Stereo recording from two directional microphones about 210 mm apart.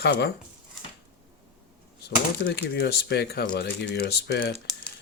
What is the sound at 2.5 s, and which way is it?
Speech, 50° left (ahead or behind).